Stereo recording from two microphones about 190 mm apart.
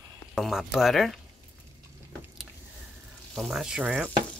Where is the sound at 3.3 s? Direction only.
Centre (ahead or behind).